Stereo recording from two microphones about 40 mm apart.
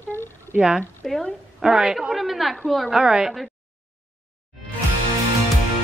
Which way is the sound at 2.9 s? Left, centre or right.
Centre.